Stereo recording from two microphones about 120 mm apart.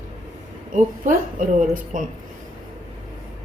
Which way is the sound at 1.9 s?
90° right.